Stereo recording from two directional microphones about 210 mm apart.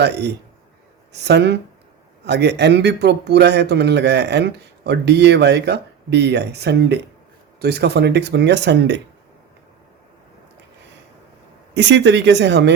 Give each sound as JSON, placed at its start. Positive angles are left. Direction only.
{"t": 0.0, "sound": "speech", "side_deg": -50}
{"t": 11.7, "sound": "speech", "side_deg": -55}